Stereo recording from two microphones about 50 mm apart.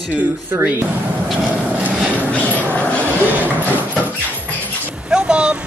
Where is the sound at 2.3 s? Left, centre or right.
Left.